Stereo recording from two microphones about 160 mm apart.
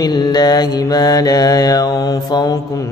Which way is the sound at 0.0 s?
25° left (ahead or behind).